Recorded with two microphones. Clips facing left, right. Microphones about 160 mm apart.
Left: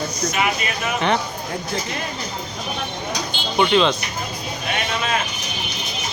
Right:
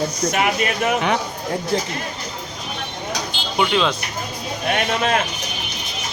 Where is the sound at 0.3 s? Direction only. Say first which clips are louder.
Right 2 dB; 60° right (ahead or behind).